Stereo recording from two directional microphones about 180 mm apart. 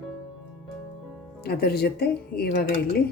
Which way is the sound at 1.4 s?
60° left (ahead or behind).